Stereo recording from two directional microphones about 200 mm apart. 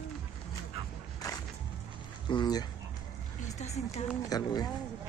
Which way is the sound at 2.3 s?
20° left (ahead or behind).